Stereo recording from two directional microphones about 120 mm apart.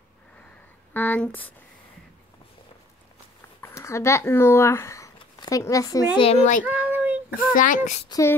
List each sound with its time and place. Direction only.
0.9 s speech: 15° left (ahead or behind)
3.6 s speech: 25° left (ahead or behind)
6.1 s a child's voice: 55° left (ahead or behind)
6.6 s child singing: 15° right (ahead or behind)
7.5 s speech: 90° left
8.1 s speech: 25° left (ahead or behind)